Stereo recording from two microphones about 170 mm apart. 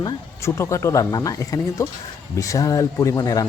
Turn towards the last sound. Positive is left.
turn(degrees=20)  # may be behind; listen again after turning